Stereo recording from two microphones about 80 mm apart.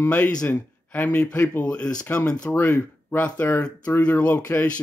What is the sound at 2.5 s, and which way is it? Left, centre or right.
A man's voice, left.